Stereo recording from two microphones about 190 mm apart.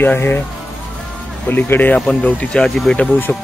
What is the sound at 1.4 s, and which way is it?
Speech, 10° left (ahead or behind).